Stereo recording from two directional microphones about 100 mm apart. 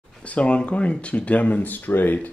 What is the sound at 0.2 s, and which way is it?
Speech, 10° left (ahead or behind).